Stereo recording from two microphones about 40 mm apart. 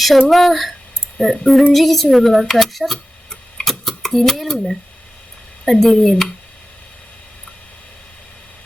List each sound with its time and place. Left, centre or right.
0.0 s speech: centre
1.7 s a sound: centre
4.1 s speech: centre
5.6 s speech: centre